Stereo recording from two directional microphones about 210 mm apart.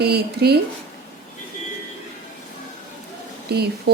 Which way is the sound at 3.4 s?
50° right (ahead or behind).